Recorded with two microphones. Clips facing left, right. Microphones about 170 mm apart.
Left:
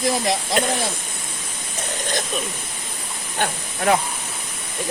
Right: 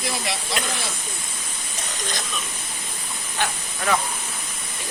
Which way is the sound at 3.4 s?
45° left (ahead or behind).